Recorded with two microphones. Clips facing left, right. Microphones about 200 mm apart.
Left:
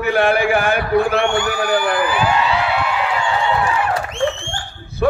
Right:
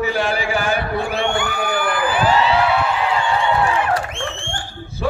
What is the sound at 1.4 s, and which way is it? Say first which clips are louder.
Speech: left 3 dB; 55° right (ahead or behind).